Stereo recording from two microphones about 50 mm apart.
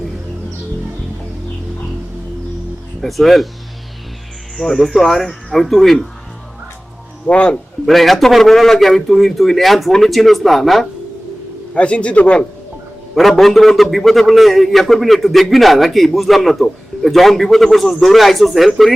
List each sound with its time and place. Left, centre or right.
3.0 s a man's voice: centre
4.5 s a man's voice: centre
7.3 s a man's voice: left
7.9 s a man's voice: centre
11.7 s a man's voice: left
13.1 s a man's voice: centre